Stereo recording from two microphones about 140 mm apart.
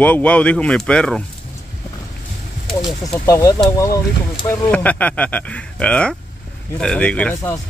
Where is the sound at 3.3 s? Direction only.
25° left (ahead or behind).